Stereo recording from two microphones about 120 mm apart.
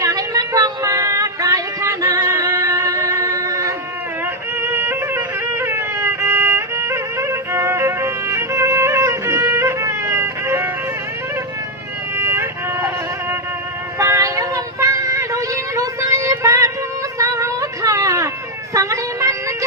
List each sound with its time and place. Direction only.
0.0 s a sound: 30° right (ahead or behind)
4.6 s music: 20° right (ahead or behind)
12.1 s vehicle: 20° right (ahead or behind)
14.0 s child singing: 25° right (ahead or behind)
17.2 s a sound: 25° right (ahead or behind)
18.7 s music: 25° right (ahead or behind)